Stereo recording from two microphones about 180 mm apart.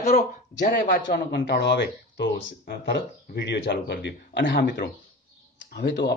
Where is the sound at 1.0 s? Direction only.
70° left (ahead or behind).